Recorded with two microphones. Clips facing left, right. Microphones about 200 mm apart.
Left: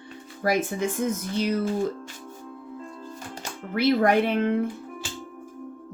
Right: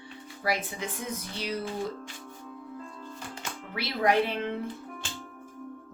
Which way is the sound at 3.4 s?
50° left (ahead or behind).